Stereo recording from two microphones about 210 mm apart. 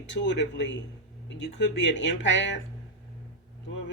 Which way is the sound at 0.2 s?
55° left (ahead or behind).